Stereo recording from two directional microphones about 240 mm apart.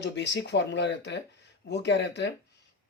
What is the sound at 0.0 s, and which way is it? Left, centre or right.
Speech, left.